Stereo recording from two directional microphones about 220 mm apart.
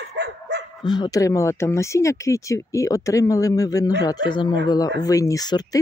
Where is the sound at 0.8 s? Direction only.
20° left (ahead or behind).